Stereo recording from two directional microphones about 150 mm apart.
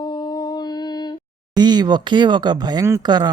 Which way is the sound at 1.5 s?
30° right (ahead or behind).